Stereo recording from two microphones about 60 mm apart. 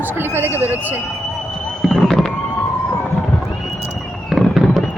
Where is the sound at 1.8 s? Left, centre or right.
Centre.